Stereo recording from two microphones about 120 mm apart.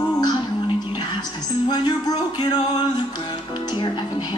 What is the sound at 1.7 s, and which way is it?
Speech, 35° left (ahead or behind).